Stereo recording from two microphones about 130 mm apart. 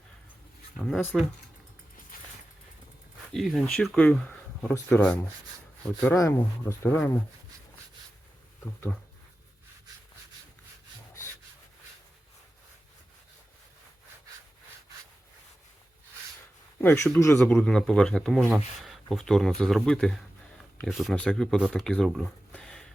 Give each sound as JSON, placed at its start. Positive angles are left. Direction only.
{"t": 0.8, "sound": "speech", "side_deg": 0}
{"t": 3.3, "sound": "speech", "side_deg": 0}
{"t": 6.1, "sound": "speech", "side_deg": 25}
{"t": 16.8, "sound": "speech", "side_deg": 20}